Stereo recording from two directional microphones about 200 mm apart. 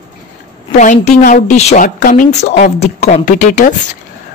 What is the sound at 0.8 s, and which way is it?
A woman's voice, 40° left (ahead or behind).